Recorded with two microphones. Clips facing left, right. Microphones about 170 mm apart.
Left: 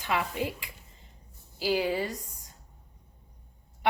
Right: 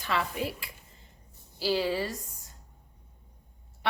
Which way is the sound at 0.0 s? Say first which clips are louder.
Left 1 dB; 15° left (ahead or behind).